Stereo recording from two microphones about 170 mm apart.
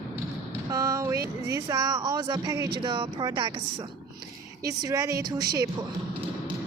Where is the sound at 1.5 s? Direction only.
20° right (ahead or behind).